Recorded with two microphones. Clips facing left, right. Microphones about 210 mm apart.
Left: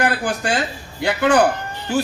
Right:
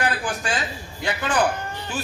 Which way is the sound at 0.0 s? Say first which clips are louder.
Left 5 dB; 65° left (ahead or behind).